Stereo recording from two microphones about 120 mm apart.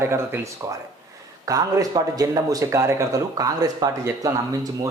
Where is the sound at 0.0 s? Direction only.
20° right (ahead or behind).